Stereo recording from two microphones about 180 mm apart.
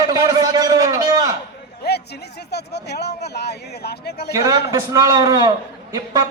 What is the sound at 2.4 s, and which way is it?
Speech, 65° left (ahead or behind).